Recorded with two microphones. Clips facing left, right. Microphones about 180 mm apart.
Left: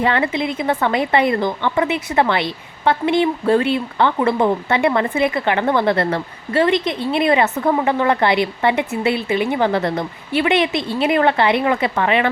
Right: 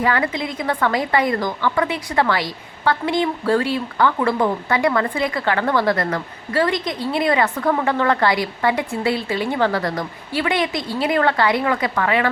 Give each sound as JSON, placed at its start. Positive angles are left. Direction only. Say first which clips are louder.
{"t": 0.0, "sound": "a woman's voice", "louder": "left 2 dB", "side_deg": 25}